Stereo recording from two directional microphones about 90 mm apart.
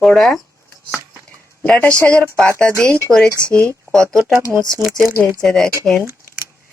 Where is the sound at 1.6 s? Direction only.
15° left (ahead or behind).